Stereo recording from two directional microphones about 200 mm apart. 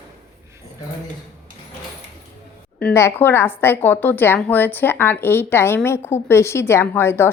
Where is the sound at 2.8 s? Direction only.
15° left (ahead or behind).